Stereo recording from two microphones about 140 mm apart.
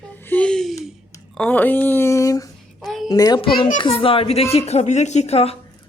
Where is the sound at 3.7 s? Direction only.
40° left (ahead or behind).